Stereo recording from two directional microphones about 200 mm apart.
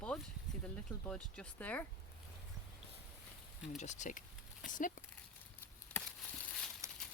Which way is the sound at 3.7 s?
35° left (ahead or behind).